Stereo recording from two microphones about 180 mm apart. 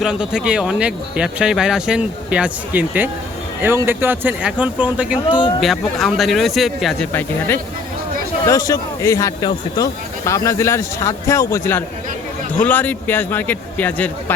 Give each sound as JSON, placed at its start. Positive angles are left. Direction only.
{"t": 0.0, "sound": "speech", "side_deg": -5}
{"t": 5.3, "sound": "a man's voice", "side_deg": 25}
{"t": 5.5, "sound": "speech", "side_deg": 0}
{"t": 7.1, "sound": "a man's voice", "side_deg": 10}